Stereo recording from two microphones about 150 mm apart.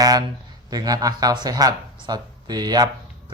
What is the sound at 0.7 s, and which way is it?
Speech, 25° right (ahead or behind).